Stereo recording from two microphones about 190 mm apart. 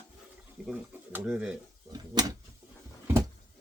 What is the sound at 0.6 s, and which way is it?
Speech, 5° right (ahead or behind).